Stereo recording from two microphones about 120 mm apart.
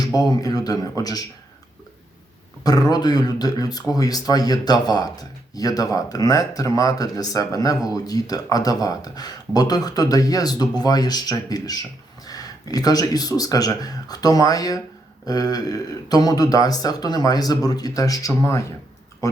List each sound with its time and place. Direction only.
0.0 s speech: 35° left (ahead or behind)
2.6 s speech: 35° left (ahead or behind)